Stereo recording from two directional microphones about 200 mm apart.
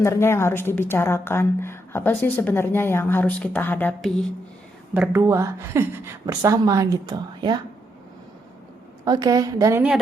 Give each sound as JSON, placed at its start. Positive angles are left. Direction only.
{"t": 0.0, "sound": "a woman's voice", "side_deg": 15}
{"t": 4.9, "sound": "a woman's voice", "side_deg": -15}
{"t": 9.0, "sound": "a woman's voice", "side_deg": -20}